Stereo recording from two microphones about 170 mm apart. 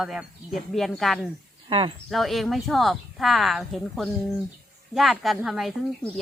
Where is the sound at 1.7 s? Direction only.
30° right (ahead or behind).